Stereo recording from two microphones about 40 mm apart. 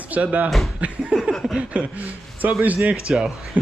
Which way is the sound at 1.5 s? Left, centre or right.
Right.